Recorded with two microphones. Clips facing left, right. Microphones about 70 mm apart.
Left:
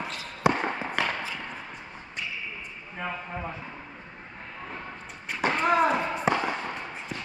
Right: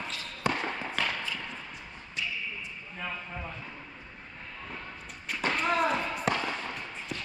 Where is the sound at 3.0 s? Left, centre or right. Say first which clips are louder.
Left 5 dB; left.